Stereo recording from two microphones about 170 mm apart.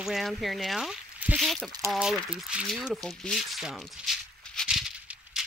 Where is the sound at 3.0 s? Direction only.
Centre (ahead or behind).